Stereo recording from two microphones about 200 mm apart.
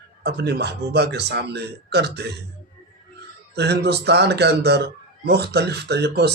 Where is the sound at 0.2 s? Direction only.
55° right (ahead or behind).